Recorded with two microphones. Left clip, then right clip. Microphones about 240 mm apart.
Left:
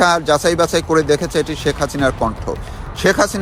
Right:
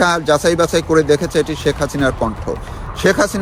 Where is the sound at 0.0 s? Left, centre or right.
Centre.